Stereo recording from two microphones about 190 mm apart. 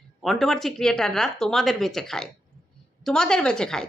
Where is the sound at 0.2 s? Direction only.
Centre (ahead or behind).